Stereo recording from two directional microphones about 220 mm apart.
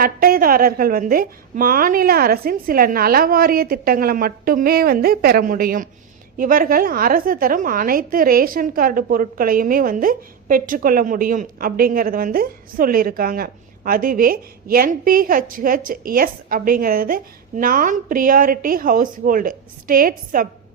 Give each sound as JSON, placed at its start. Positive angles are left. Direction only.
{"t": 0.0, "sound": "a woman's voice", "side_deg": -40}